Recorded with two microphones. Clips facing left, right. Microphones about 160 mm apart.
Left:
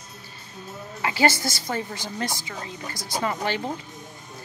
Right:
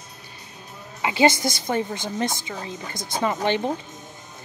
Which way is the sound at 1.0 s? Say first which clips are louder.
Right 3 dB; 20° right (ahead or behind).